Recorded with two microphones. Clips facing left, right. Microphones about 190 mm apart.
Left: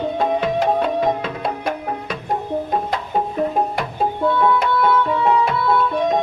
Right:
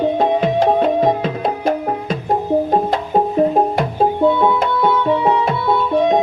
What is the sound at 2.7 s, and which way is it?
Music, 35° right (ahead or behind).